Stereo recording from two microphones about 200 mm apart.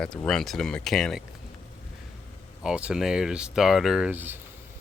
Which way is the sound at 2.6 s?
5° right (ahead or behind).